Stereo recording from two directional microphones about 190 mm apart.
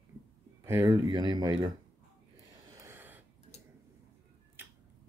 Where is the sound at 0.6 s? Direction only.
20° right (ahead or behind).